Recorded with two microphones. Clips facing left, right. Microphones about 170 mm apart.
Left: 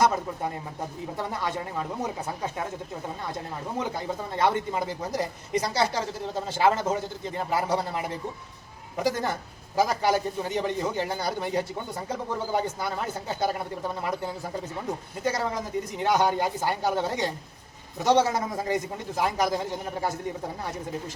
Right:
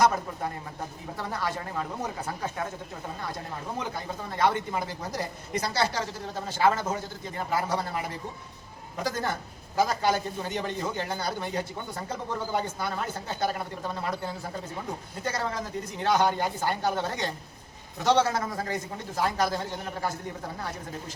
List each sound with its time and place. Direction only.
1.1 s speech: 20° left (ahead or behind)
4.3 s a man's voice: 20° left (ahead or behind)